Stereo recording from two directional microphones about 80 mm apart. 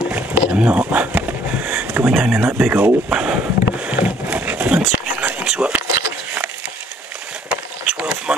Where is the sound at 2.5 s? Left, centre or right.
Right.